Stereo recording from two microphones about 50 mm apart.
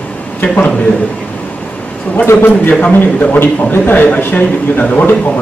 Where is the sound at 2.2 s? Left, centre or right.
Left.